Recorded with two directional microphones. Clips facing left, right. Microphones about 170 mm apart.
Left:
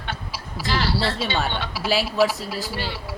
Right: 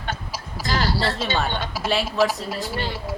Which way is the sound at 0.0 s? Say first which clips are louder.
Right 2 dB; 45° right (ahead or behind).